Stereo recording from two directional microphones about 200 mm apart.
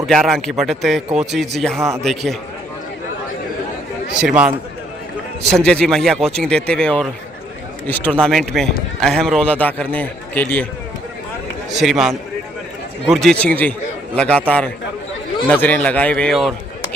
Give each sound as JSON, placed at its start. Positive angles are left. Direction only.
{"t": 0.0, "sound": "speech", "side_deg": 0}
{"t": 4.1, "sound": "speech", "side_deg": -5}
{"t": 5.5, "sound": "a man's voice", "side_deg": 5}
{"t": 11.7, "sound": "a man's voice", "side_deg": 0}